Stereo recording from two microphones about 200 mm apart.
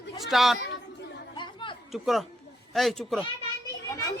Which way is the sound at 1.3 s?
25° left (ahead or behind).